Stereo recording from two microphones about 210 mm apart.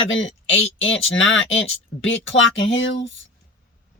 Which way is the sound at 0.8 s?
65° left (ahead or behind).